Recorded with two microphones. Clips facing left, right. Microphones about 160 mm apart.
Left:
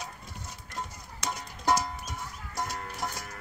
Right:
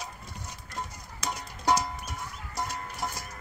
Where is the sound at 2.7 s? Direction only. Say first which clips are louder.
Even; centre (ahead or behind).